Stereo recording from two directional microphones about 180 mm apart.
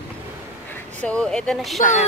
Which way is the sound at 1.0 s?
5° left (ahead or behind).